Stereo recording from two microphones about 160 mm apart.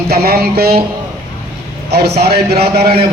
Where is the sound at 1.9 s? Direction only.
90° right.